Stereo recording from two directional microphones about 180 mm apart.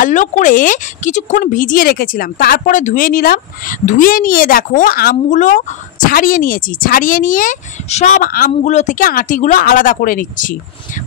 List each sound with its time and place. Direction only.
0.0 s speech: 45° left (ahead or behind)